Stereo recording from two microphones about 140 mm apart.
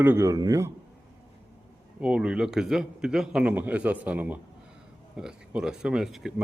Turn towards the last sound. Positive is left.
turn(degrees=-5)  # may be behind; listen again after turning